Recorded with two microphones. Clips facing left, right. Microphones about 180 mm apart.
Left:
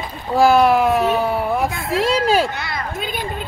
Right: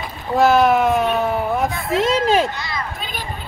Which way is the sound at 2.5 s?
60° left (ahead or behind).